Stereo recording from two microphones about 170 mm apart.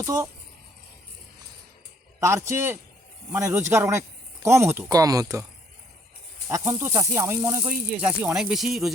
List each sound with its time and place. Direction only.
0.0 s speech: 20° right (ahead or behind)
2.2 s speech: 15° right (ahead or behind)
6.5 s speech: 15° right (ahead or behind)